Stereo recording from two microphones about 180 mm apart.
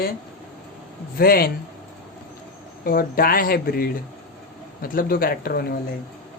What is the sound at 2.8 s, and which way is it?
Speech, 55° left (ahead or behind).